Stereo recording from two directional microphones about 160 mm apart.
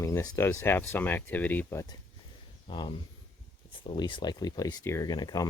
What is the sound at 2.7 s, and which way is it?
Speech, 30° left (ahead or behind).